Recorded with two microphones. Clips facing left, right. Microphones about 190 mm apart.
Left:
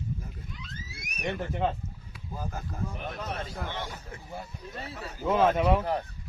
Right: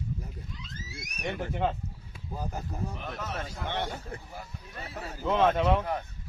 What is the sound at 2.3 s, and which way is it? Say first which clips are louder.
Speech: right 1 dB; 20° right (ahead or behind).